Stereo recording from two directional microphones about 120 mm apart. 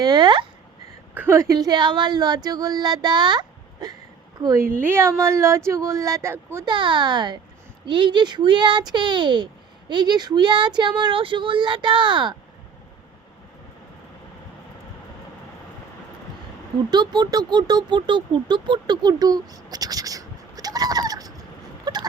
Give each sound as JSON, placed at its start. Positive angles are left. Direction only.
{"t": 0.0, "sound": "speech", "side_deg": -35}
{"t": 1.1, "sound": "a woman's voice", "side_deg": -15}
{"t": 4.8, "sound": "speech", "side_deg": -20}
{"t": 6.7, "sound": "speech", "side_deg": -40}
{"t": 16.9, "sound": "speech", "side_deg": -35}
{"t": 21.9, "sound": "a sound", "side_deg": -35}